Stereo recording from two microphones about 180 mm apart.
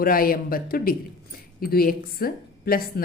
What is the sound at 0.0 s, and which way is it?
Speech, 55° left (ahead or behind).